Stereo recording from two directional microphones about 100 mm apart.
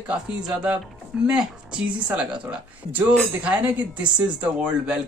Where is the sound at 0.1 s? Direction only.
10° right (ahead or behind).